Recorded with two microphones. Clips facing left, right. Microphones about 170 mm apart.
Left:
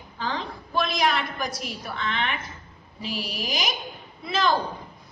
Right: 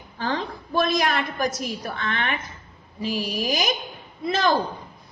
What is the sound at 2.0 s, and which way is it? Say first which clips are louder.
Speech: left 2 dB; 55° right (ahead or behind).